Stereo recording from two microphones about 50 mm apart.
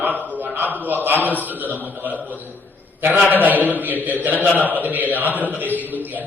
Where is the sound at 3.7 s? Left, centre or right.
Right.